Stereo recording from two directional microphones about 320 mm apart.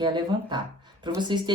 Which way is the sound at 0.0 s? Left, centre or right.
Centre.